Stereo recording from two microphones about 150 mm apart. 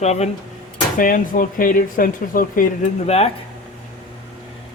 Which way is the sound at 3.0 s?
45° left (ahead or behind).